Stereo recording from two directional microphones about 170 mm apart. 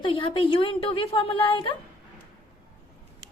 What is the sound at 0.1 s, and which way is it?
A woman's voice, 30° left (ahead or behind).